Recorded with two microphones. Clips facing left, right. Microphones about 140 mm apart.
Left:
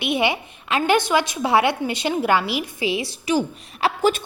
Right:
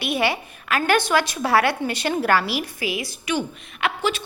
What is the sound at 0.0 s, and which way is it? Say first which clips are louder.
A woman's voice: left 1 dB; 20° left (ahead or behind).